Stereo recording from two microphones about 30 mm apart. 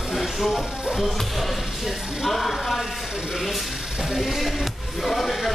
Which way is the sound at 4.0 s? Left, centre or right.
Centre.